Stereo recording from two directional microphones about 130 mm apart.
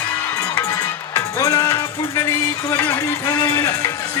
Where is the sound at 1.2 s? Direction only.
25° left (ahead or behind).